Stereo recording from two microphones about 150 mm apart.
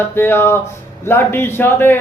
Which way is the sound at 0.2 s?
15° left (ahead or behind).